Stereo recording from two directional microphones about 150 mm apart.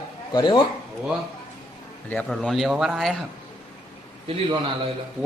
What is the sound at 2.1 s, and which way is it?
Speech, 10° left (ahead or behind).